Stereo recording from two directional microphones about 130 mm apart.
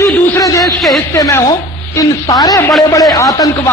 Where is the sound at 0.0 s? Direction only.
25° left (ahead or behind).